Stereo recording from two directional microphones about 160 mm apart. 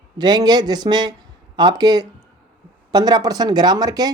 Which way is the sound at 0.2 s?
25° right (ahead or behind).